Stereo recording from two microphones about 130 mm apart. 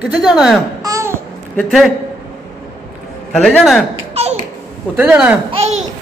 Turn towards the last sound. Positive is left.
turn(degrees=-55)  # may be behind; listen again after turning